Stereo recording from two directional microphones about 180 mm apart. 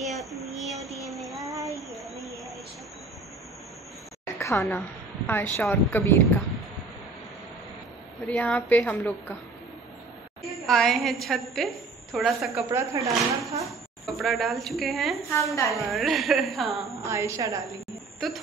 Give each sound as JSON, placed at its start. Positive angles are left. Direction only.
{"t": 0.0, "sound": "child singing", "side_deg": 0}
{"t": 1.4, "sound": "child singing", "side_deg": -20}
{"t": 1.8, "sound": "a sound", "side_deg": 0}
{"t": 4.4, "sound": "a woman's voice", "side_deg": 15}
{"t": 8.3, "sound": "a woman's voice", "side_deg": 10}
{"t": 10.6, "sound": "a woman's voice", "side_deg": 0}
{"t": 12.7, "sound": "a woman's voice", "side_deg": -15}
{"t": 13.7, "sound": "speech", "side_deg": 0}
{"t": 15.3, "sound": "a woman's voice", "side_deg": 15}
{"t": 15.7, "sound": "speech", "side_deg": 0}
{"t": 17.0, "sound": "a woman's voice", "side_deg": -15}